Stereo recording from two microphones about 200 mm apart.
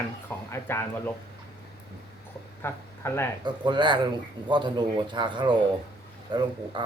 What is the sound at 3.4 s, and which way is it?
A man's voice, 20° right (ahead or behind).